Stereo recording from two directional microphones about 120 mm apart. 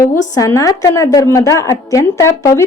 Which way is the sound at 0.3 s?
25° left (ahead or behind).